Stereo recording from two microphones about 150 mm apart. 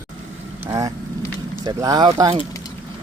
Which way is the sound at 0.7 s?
20° right (ahead or behind).